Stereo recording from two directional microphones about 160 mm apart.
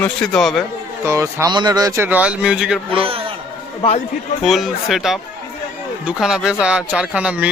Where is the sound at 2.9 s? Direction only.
35° right (ahead or behind).